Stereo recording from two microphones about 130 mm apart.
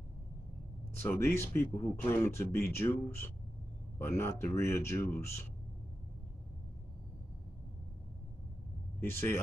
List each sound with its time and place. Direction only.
1.0 s speech: 20° left (ahead or behind)
9.0 s speech: 15° left (ahead or behind)